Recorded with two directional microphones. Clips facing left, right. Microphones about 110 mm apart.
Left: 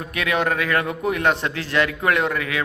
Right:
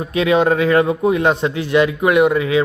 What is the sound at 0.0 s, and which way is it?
A man's voice, 20° right (ahead or behind).